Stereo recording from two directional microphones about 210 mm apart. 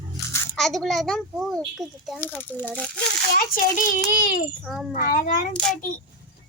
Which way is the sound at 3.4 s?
40° left (ahead or behind).